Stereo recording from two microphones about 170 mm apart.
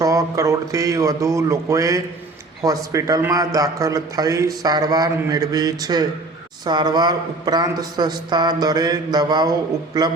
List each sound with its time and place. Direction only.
0.0 s a man's voice: 20° right (ahead or behind)